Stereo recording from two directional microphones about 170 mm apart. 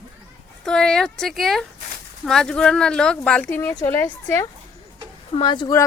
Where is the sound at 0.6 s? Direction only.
5° left (ahead or behind).